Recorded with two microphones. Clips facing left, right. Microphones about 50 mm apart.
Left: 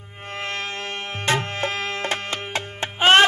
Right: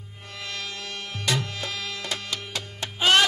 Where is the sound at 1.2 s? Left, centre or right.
Left.